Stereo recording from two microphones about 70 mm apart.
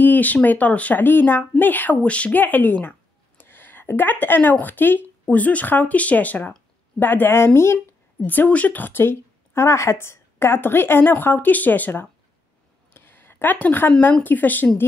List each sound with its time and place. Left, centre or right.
0.0 s speech: left
8.3 s speech: left
12.9 s a sound: left
14.2 s speech: left